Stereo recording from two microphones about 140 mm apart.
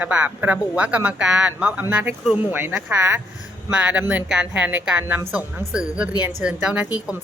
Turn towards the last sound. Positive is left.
turn(degrees=-5)  # may be behind; listen again after turning